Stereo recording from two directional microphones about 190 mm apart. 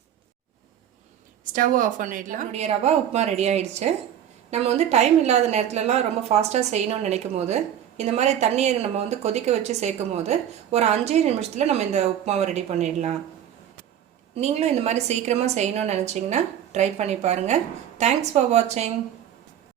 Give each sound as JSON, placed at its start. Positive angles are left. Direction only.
{"t": 1.5, "sound": "a woman's voice", "side_deg": -45}
{"t": 14.3, "sound": "a woman's voice", "side_deg": -35}